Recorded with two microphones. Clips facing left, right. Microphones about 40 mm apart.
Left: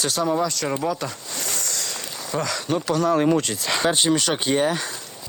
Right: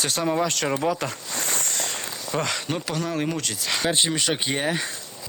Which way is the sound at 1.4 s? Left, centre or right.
Right.